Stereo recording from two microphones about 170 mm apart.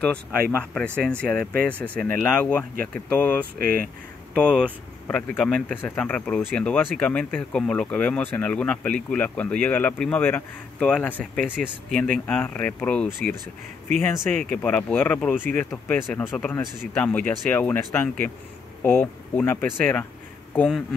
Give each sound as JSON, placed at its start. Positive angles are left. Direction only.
{"t": 0.7, "sound": "speech", "side_deg": 5}
{"t": 3.5, "sound": "speech", "side_deg": -60}
{"t": 5.0, "sound": "speech", "side_deg": 10}